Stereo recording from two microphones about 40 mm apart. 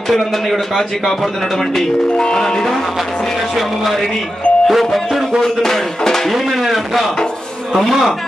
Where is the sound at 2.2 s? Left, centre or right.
Centre.